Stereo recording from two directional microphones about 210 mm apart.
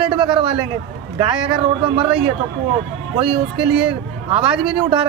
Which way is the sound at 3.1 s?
25° right (ahead or behind).